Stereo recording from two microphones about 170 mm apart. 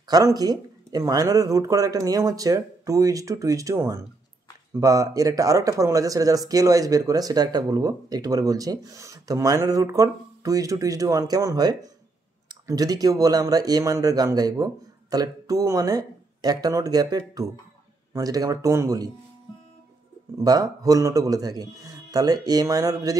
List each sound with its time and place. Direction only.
0.1 s speech: 20° right (ahead or behind)
20.3 s speech: 20° right (ahead or behind)